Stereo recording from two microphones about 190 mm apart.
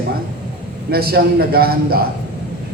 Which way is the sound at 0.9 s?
55° right (ahead or behind).